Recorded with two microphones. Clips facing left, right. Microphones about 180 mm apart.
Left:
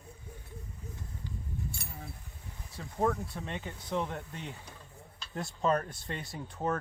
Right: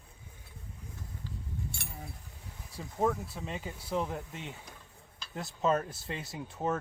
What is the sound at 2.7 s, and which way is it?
Speech, 10° right (ahead or behind).